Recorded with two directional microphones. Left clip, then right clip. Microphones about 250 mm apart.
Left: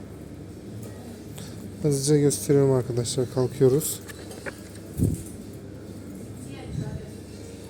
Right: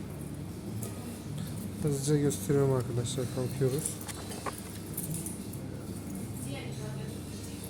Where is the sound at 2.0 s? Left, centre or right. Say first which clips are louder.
Left 8 dB; left.